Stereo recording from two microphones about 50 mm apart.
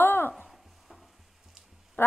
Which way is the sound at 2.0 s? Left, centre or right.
Left.